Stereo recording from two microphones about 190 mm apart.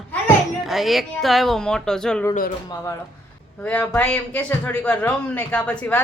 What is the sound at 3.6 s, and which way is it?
A woman's voice, 10° left (ahead or behind).